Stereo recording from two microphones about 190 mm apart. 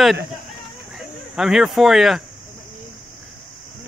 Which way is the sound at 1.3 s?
Centre (ahead or behind).